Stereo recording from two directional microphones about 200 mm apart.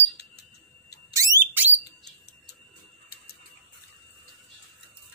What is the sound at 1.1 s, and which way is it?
Alarm, 10° right (ahead or behind).